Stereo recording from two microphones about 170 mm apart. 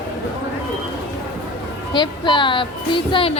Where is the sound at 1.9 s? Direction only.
25° left (ahead or behind).